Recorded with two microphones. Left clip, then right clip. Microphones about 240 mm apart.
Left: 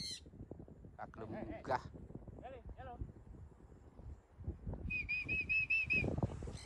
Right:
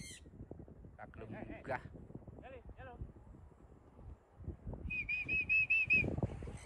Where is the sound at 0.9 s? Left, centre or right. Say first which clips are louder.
Left 3 dB; centre.